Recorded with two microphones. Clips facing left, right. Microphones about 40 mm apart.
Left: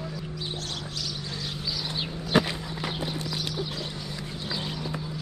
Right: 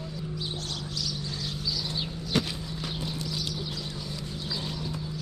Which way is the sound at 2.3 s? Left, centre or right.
Left.